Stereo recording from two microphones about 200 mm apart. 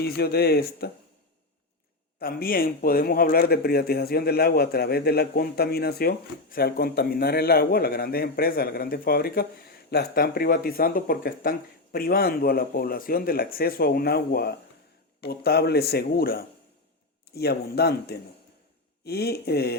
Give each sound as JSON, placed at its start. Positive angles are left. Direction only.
{"t": 0.0, "sound": "speech", "side_deg": 50}
{"t": 2.1, "sound": "speech", "side_deg": 45}